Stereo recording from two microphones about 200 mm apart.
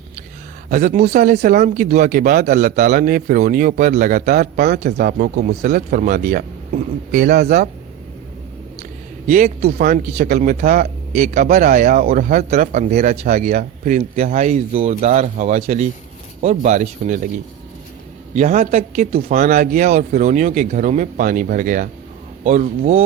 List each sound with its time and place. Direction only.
0.7 s speech: 40° right (ahead or behind)
9.2 s speech: 40° right (ahead or behind)
9.7 s speech: 45° right (ahead or behind)